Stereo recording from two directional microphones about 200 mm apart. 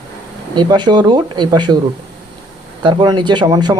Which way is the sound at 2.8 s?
20° right (ahead or behind).